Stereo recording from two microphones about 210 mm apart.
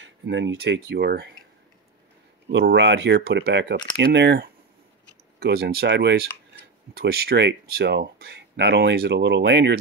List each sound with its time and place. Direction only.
0.0 s speech: 60° right (ahead or behind)
2.5 s speech: 55° right (ahead or behind)